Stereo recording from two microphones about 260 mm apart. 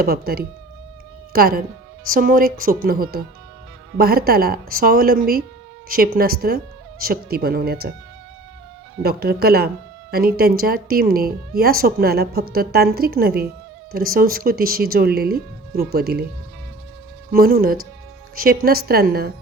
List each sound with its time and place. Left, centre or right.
0.0 s speech: right
9.0 s speech: right
17.3 s speech: right